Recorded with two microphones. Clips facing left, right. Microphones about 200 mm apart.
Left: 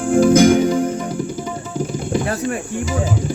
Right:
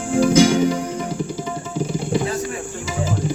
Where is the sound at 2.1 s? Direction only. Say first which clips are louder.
Left 4 dB; 60° left (ahead or behind).